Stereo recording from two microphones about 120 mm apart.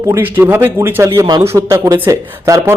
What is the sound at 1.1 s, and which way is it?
Speech, 35° right (ahead or behind).